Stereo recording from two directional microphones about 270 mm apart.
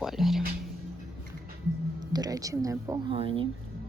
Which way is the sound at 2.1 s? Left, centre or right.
Centre.